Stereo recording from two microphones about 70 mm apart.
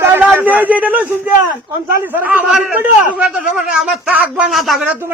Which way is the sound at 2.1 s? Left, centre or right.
Right.